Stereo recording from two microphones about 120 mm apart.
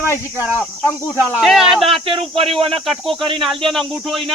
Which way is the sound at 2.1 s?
50° right (ahead or behind).